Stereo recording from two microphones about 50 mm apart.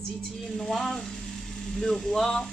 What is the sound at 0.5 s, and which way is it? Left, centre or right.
Speech, centre.